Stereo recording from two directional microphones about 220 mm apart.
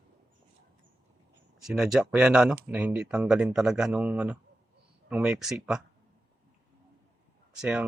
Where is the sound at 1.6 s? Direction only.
Centre (ahead or behind).